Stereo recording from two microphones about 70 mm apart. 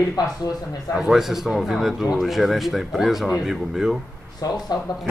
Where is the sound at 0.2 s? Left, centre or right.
Left.